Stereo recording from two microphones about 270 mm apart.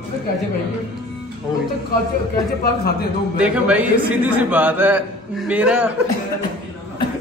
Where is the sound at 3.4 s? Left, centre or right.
Centre.